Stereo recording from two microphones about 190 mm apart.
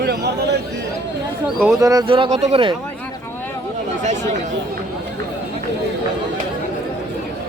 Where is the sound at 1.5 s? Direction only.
Centre (ahead or behind).